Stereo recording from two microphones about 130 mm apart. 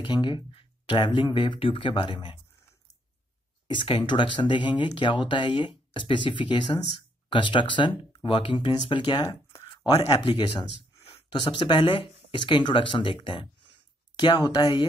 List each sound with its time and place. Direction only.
0.0 s speech: 35° left (ahead or behind)
3.6 s speech: 40° left (ahead or behind)
11.9 s speech: 40° left (ahead or behind)